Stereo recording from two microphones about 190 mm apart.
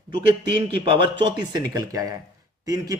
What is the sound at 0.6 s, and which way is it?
Speech, 25° right (ahead or behind).